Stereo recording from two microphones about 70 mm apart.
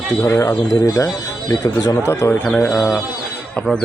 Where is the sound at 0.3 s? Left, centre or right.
Left.